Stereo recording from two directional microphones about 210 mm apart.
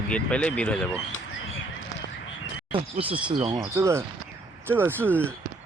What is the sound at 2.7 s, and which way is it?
Speech, 25° right (ahead or behind).